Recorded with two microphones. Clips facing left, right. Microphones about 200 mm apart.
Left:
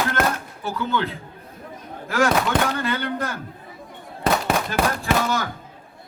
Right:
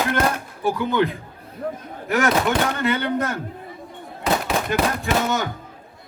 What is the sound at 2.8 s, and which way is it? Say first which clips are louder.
Speech: right 3 dB; 20° right (ahead or behind).